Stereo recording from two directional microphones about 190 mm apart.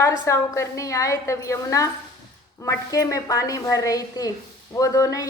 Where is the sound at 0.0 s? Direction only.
15° left (ahead or behind).